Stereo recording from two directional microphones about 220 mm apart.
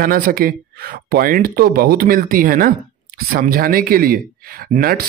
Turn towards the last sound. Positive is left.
turn(degrees=-45)  # may be behind; listen again after turning